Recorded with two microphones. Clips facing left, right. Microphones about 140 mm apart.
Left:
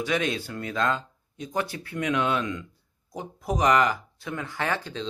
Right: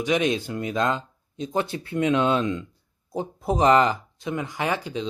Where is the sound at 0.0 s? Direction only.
20° right (ahead or behind).